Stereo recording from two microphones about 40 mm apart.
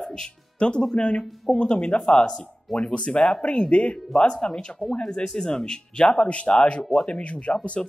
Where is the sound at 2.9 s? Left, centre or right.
Left.